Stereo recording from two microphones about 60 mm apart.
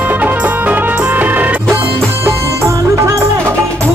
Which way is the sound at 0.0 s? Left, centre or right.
Right.